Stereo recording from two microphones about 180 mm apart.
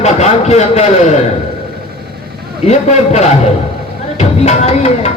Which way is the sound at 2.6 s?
40° left (ahead or behind).